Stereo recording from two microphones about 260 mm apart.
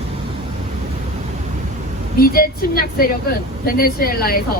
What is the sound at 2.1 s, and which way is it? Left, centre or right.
Speech, left.